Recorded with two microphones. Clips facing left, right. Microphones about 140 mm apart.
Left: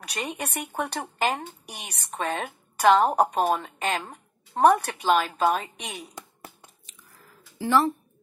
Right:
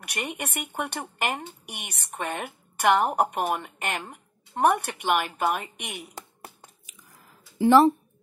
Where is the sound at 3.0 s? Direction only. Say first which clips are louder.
Left 3 dB; 30° left (ahead or behind).